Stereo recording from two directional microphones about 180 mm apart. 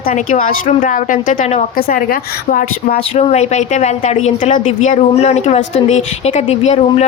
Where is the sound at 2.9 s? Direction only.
35° left (ahead or behind).